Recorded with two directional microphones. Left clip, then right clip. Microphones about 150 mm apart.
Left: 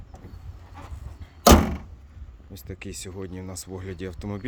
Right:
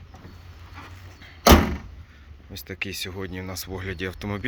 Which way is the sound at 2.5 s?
15° left (ahead or behind).